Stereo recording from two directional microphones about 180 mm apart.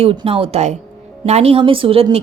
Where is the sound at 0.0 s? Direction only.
30° right (ahead or behind).